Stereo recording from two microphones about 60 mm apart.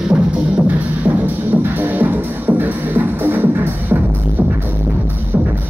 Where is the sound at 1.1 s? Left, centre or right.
Right.